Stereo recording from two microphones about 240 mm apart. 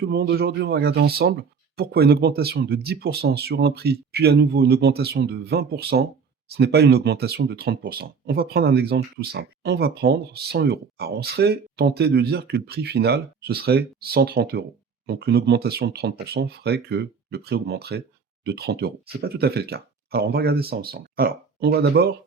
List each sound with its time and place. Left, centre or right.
0.0 s speech: right